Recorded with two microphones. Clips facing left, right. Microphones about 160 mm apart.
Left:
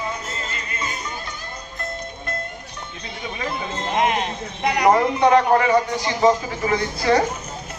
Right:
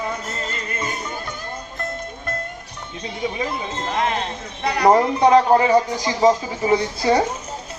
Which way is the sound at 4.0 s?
15° left (ahead or behind).